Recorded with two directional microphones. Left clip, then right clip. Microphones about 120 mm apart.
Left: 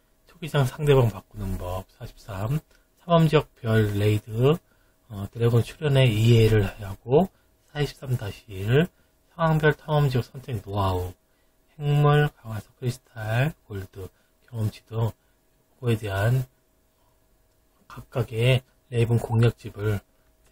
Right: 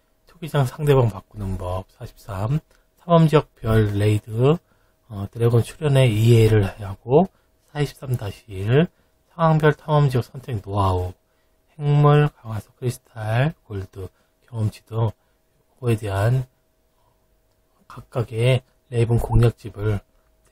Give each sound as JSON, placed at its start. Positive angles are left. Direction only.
{"t": 0.3, "sound": "speech", "side_deg": -20}
{"t": 17.8, "sound": "speech", "side_deg": -25}